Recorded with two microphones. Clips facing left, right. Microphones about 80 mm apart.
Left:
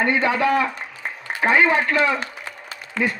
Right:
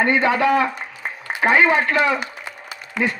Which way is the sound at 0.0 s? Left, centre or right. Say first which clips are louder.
Right 2 dB; right.